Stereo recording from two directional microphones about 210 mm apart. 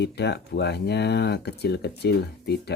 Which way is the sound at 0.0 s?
55° left (ahead or behind).